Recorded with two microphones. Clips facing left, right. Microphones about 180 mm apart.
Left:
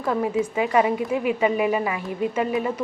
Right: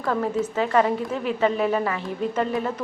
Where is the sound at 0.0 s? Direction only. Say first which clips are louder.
Left 1 dB; 10° left (ahead or behind).